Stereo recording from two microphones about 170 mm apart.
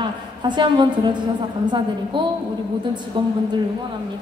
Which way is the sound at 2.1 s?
30° right (ahead or behind).